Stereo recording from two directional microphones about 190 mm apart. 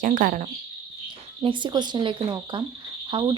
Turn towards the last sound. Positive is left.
turn(degrees=-25)  # may be behind; listen again after turning